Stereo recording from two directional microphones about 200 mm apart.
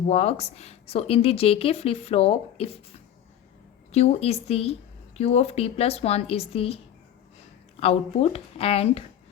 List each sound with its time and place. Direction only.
0.1 s a woman's voice: 30° left (ahead or behind)
7.8 s a woman's voice: 30° left (ahead or behind)